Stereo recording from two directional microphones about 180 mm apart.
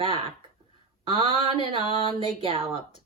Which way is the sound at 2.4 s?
30° right (ahead or behind).